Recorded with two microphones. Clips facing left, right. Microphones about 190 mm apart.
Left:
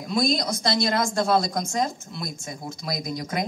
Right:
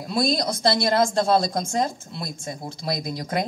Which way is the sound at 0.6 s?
30° right (ahead or behind).